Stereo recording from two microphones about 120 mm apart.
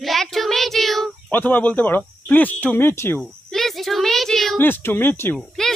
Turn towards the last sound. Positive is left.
turn(degrees=5)  # may be behind; listen again after turning